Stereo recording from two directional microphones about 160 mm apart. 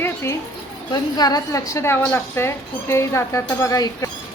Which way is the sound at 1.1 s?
25° left (ahead or behind).